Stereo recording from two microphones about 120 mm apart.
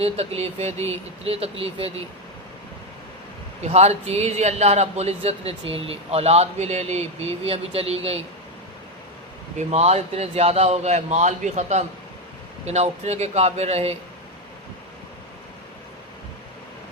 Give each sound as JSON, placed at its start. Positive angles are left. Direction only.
{"t": 0.0, "sound": "a man's voice", "side_deg": -55}
{"t": 3.6, "sound": "a man's voice", "side_deg": -65}
{"t": 9.6, "sound": "a man's voice", "side_deg": -65}